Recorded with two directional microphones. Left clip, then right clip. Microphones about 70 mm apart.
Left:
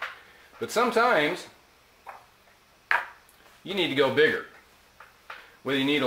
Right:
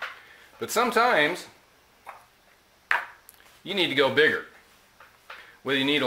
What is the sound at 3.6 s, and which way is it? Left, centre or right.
Speech, right.